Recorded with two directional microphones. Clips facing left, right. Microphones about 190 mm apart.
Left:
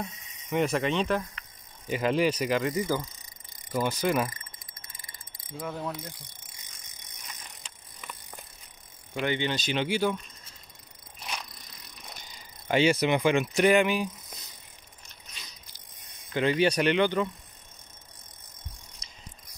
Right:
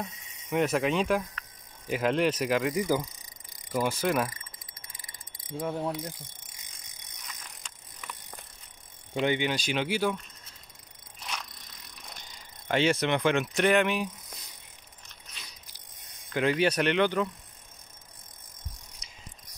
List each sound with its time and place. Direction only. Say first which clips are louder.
0.0 s speech: left 1 dB; centre (ahead or behind)
4.3 s mechanisms: left 1 dB; 15° right (ahead or behind)
5.5 s pulleys: right 3 dB; 30° right (ahead or behind)
8.0 s bicycle: even; 5° left (ahead or behind)
9.1 s speech: right 2 dB; 15° right (ahead or behind)
12.6 s speech: left 2 dB; 5° left (ahead or behind)
16.3 s speech: left 1 dB; centre (ahead or behind)